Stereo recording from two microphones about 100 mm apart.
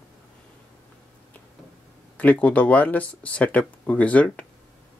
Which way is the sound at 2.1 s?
15° left (ahead or behind).